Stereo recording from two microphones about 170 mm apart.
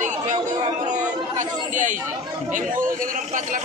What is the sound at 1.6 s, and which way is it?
Chatter, 50° right (ahead or behind).